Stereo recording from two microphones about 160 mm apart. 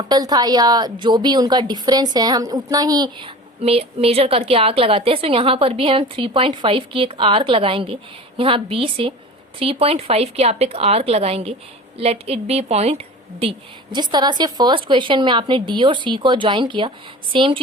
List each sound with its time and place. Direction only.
0.0 s a woman's voice: 25° right (ahead or behind)